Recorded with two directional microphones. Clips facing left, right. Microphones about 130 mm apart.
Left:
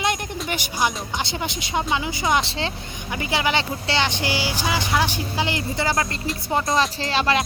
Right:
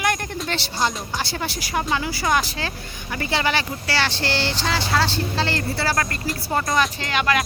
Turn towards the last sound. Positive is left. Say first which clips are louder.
# left 1 dB
turn(degrees=30)  # may be behind; listen again after turning